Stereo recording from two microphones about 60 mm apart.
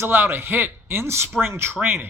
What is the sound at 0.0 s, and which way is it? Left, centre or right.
A man's voice, right.